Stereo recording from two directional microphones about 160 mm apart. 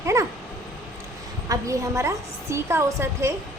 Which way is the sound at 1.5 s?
20° right (ahead or behind).